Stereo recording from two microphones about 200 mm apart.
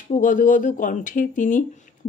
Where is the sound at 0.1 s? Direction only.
40° left (ahead or behind).